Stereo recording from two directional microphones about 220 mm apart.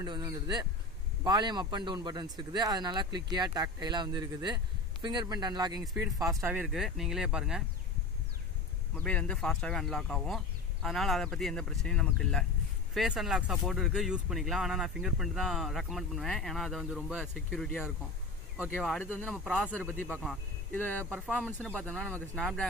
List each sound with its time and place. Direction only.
0.0 s speech: 15° right (ahead or behind)
8.9 s speech: 5° left (ahead or behind)